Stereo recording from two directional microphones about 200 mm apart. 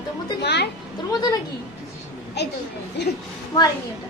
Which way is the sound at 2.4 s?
55° left (ahead or behind).